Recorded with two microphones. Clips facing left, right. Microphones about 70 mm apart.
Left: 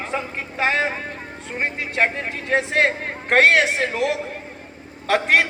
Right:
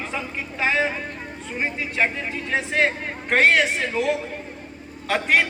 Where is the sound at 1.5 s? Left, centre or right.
Left.